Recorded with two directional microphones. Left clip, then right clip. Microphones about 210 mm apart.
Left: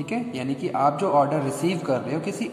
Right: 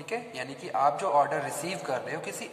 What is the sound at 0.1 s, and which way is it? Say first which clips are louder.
A man's voice: left 4 dB; 15° left (ahead or behind).